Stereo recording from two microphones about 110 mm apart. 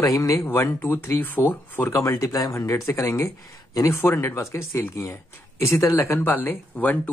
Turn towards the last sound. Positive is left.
turn(degrees=15)  # may be behind; listen again after turning